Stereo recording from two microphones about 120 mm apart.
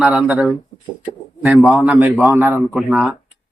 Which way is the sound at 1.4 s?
10° right (ahead or behind).